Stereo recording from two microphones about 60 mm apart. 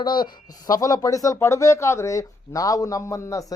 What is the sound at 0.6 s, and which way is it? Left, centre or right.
Speech, left.